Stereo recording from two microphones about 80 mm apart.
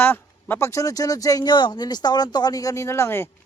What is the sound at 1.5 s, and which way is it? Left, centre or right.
Speech, left.